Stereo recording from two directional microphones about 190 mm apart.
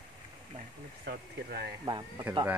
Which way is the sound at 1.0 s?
55° right (ahead or behind).